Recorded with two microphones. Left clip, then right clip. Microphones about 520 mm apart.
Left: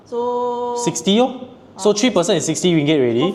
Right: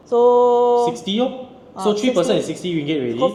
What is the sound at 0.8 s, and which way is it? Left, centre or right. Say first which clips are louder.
A man's voice: left 3 dB; left.